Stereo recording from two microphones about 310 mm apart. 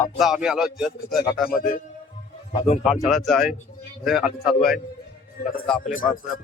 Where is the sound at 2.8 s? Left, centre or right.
Centre.